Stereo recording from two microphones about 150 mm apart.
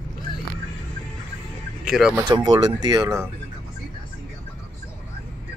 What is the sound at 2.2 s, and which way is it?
Speech, 30° right (ahead or behind).